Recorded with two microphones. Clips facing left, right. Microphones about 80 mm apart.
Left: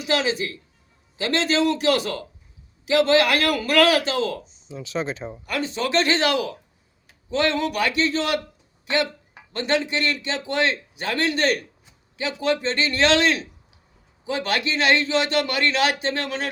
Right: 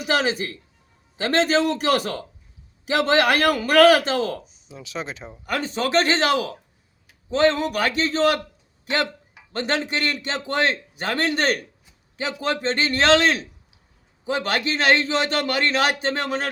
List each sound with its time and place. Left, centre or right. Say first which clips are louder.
0.0 s a man's voice: right 1 dB; right
4.7 s speech: left 4 dB; centre
5.5 s a man's voice: right 1 dB; right
9.7 s a man's voice: left 3 dB; right
14.4 s a man's voice: right 1 dB; right